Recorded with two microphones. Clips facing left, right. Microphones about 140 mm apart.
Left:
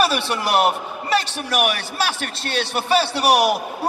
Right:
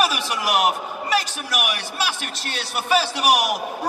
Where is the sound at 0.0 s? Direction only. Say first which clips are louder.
Left 2 dB; 30° left (ahead or behind).